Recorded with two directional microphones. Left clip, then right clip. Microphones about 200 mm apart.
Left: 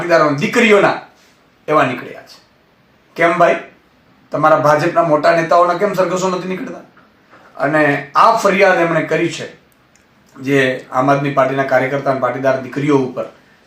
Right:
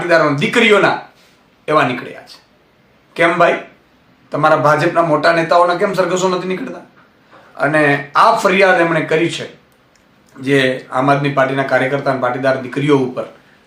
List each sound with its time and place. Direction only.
0.1 s speech: centre (ahead or behind)
3.2 s speech: 5° right (ahead or behind)
10.4 s speech: centre (ahead or behind)